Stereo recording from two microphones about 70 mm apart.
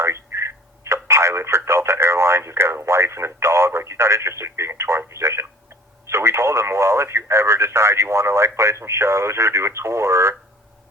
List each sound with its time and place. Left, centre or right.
0.0 s telephone: right
1.0 s radio: right
6.1 s speech: right